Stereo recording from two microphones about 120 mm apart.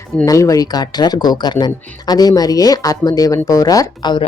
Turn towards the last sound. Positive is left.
turn(degrees=40)  # may be behind; listen again after turning